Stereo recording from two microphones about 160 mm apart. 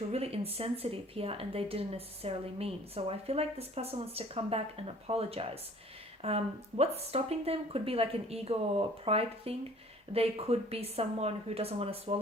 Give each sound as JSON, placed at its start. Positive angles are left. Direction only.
{"t": 0.1, "sound": "speech", "side_deg": -40}